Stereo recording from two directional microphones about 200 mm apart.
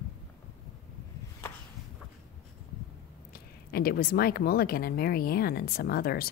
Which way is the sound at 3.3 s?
50° left (ahead or behind).